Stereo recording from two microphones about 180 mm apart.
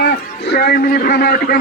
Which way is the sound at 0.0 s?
65° left (ahead or behind).